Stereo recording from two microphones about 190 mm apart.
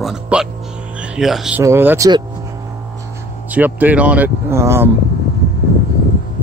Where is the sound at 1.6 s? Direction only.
10° right (ahead or behind).